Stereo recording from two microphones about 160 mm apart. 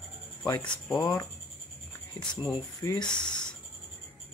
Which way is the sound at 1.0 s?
25° left (ahead or behind).